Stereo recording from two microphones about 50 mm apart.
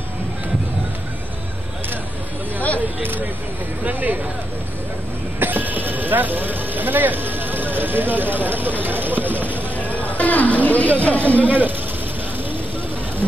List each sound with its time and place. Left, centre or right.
3.0 s speech: right
5.4 s vehicle: right
8.8 s a sound: right
9.8 s a sound: left
11.1 s speech: left
11.4 s speech: right